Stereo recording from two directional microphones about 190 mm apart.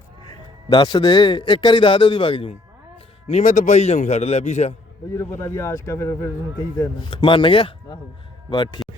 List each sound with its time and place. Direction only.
0.3 s a man's voice: 25° left (ahead or behind)
5.1 s a man's voice: 15° left (ahead or behind)